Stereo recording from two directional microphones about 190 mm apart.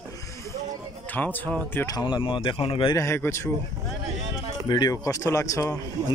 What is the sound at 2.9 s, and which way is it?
Speech, 15° left (ahead or behind).